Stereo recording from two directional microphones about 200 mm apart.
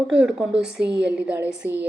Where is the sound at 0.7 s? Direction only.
60° right (ahead or behind).